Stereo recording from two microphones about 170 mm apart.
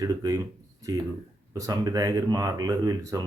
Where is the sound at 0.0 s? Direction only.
20° right (ahead or behind).